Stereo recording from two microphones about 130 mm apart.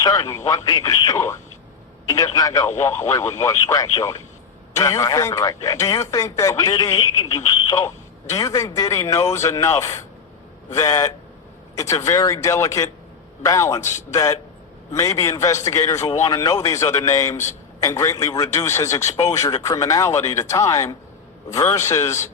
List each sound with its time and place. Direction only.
0.0 s speech: 30° left (ahead or behind)